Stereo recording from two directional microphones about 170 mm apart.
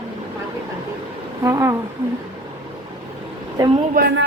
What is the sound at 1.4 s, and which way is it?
Speech, 15° right (ahead or behind).